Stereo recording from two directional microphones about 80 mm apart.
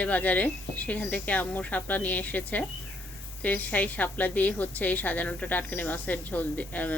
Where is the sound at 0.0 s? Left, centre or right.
Centre.